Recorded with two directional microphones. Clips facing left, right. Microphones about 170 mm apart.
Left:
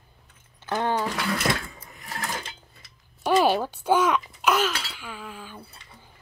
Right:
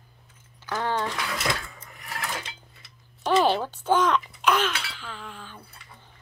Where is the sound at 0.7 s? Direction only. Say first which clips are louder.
Left 2 dB; 20° left (ahead or behind).